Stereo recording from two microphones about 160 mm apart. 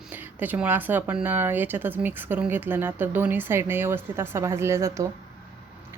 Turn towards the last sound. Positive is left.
turn(degrees=-20)  # may be behind; listen again after turning